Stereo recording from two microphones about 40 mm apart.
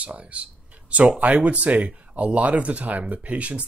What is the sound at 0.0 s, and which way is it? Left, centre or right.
Speech, right.